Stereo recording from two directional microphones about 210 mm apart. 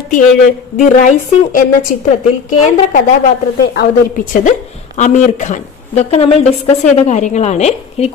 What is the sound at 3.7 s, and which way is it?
A woman's voice, 45° left (ahead or behind).